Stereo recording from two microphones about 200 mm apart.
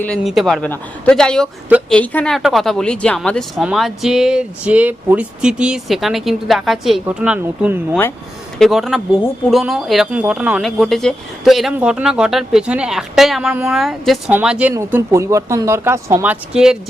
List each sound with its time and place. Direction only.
0.0 s speech: centre (ahead or behind)